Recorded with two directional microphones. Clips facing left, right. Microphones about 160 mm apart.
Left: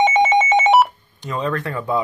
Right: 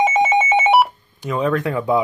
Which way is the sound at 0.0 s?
5° right (ahead or behind).